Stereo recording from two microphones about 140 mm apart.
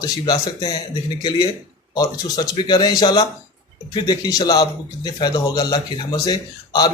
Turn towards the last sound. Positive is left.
turn(degrees=30)  # may be behind; listen again after turning